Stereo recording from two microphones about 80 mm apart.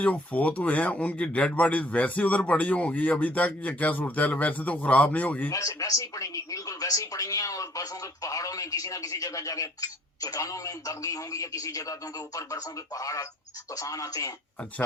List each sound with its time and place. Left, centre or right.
0.0 s speech: centre
5.5 s speech: left